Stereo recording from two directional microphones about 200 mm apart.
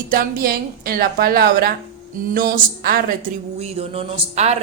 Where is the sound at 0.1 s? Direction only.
45° right (ahead or behind).